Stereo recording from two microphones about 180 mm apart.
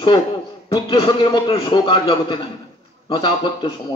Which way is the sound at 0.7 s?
30° left (ahead or behind).